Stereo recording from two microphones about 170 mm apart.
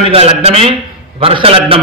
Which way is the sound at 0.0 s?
35° right (ahead or behind).